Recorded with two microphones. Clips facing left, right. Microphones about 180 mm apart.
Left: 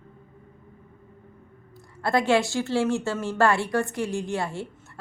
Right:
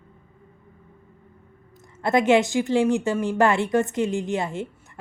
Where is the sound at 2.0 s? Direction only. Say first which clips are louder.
Right 3 dB; 20° right (ahead or behind).